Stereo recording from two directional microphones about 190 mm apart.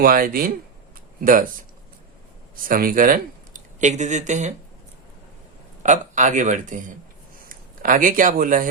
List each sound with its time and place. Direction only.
0.0 s speech: 50° right (ahead or behind)
2.6 s speech: 50° right (ahead or behind)
5.8 s speech: 40° right (ahead or behind)